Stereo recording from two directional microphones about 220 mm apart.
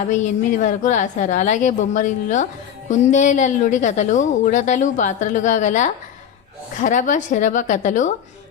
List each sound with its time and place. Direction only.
0.1 s a woman's voice: 35° left (ahead or behind)